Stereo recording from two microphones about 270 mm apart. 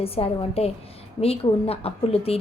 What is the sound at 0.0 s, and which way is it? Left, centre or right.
A woman's voice, left.